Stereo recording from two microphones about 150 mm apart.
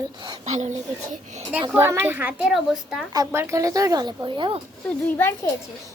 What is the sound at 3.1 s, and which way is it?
Speech, 20° right (ahead or behind).